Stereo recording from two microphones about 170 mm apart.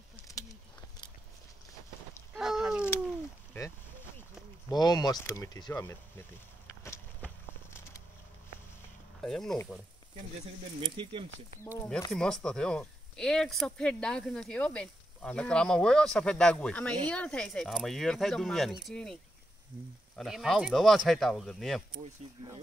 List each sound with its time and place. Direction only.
2.3 s a sound: 5° right (ahead or behind)
4.6 s speech: 25° left (ahead or behind)
6.8 s a sound: 10° left (ahead or behind)
9.2 s speech: centre (ahead or behind)
10.8 s speech: 30° right (ahead or behind)
12.1 s speech: 5° left (ahead or behind)
20.2 s speech: centre (ahead or behind)